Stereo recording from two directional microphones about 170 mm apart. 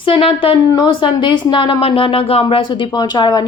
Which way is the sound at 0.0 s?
30° left (ahead or behind).